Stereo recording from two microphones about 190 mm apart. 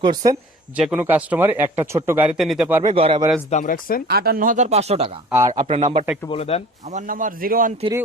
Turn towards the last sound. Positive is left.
turn(degrees=-50)  # may be behind; listen again after turning